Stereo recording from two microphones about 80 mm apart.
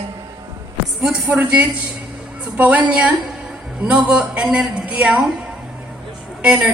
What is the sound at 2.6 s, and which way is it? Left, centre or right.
A woman's voice, centre.